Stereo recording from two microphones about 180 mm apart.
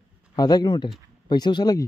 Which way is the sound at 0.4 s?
20° left (ahead or behind).